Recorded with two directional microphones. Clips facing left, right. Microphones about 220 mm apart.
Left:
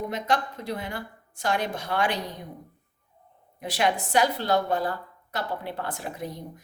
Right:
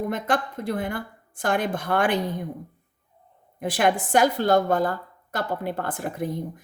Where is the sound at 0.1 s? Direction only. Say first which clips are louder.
Right 2 dB; 50° right (ahead or behind).